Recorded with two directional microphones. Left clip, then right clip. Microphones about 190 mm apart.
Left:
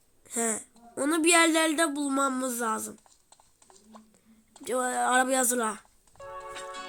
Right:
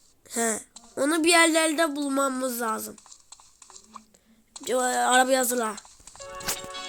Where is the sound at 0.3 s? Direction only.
Centre (ahead or behind).